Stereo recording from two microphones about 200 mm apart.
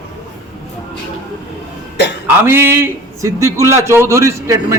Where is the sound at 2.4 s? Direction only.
10° right (ahead or behind).